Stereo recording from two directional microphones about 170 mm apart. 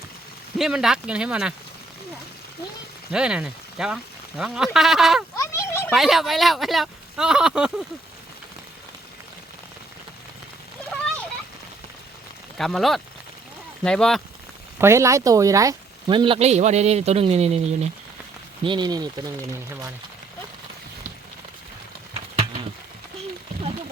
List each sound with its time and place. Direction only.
0.6 s speech: 5° right (ahead or behind)
3.1 s speech: 5° right (ahead or behind)
5.4 s a sound: 15° left (ahead or behind)
5.9 s speech: centre (ahead or behind)
12.5 s speech: centre (ahead or behind)
14.8 s speech: 15° right (ahead or behind); by 17.7 s 40° right (ahead or behind)
18.6 s speech: 25° right (ahead or behind)